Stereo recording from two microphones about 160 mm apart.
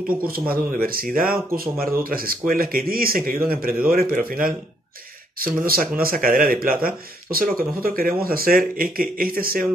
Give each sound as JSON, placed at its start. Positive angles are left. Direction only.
{"t": 0.3, "sound": "speech", "side_deg": -65}
{"t": 5.7, "sound": "speech", "side_deg": -65}